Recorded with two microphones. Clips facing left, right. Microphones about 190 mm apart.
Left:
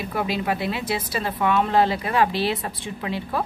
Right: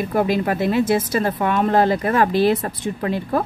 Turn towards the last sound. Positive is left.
turn(degrees=-50)  # may be behind; listen again after turning